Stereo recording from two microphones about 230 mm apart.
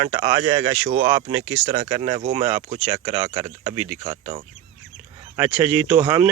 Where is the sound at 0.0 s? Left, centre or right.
Centre.